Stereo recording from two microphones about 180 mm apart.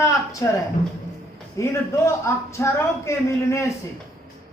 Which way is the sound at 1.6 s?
15° left (ahead or behind).